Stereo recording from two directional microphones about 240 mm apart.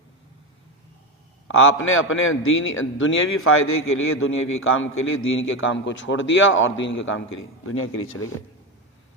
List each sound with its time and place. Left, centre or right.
1.5 s a man's voice: left